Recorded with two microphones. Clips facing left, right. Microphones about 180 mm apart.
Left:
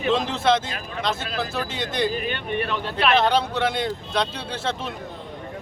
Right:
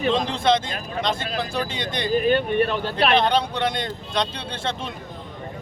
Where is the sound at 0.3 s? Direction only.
5° left (ahead or behind).